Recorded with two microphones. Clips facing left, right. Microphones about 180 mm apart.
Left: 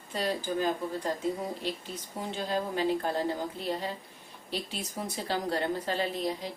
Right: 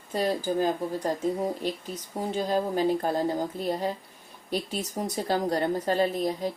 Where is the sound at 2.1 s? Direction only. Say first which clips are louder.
Right 5 dB; 40° right (ahead or behind).